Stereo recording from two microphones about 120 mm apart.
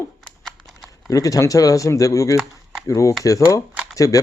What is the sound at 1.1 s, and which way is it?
Speech, 30° left (ahead or behind).